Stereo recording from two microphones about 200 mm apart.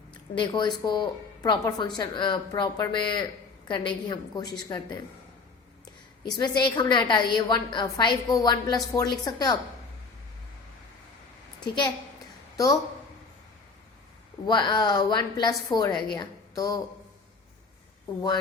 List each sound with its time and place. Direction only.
0.1 s a woman's voice: 25° left (ahead or behind)
6.6 s a woman's voice: 20° left (ahead or behind)
11.6 s a child's voice: 20° left (ahead or behind)
14.4 s a woman's voice: 20° left (ahead or behind)